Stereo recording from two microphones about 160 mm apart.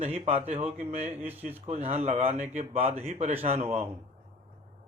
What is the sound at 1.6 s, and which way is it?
Speech, 40° right (ahead or behind).